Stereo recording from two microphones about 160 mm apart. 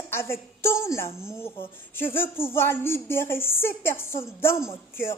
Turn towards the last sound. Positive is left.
turn(degrees=15)  # may be behind; listen again after turning